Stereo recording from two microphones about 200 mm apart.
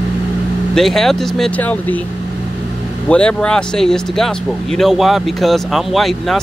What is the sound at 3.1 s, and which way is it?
Speech, 5° left (ahead or behind).